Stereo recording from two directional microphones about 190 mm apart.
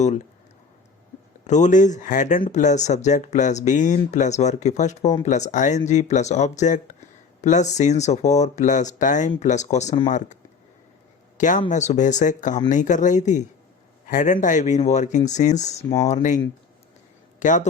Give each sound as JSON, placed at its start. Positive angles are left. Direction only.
{"t": 1.5, "sound": "speech", "side_deg": 40}
{"t": 11.3, "sound": "speech", "side_deg": 40}
{"t": 17.4, "sound": "a man's voice", "side_deg": 40}